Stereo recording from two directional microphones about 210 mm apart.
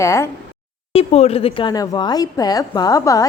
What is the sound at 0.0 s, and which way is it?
Speech, 15° left (ahead or behind).